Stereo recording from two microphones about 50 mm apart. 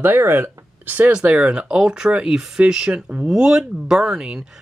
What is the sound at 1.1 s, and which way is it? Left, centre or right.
Speech, right.